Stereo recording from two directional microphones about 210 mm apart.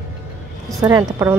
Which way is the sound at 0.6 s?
Centre (ahead or behind).